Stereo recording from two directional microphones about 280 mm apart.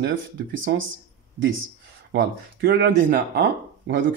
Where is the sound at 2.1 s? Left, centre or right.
Right.